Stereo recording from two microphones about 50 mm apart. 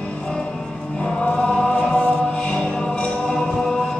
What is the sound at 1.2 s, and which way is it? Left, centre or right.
Chant, centre.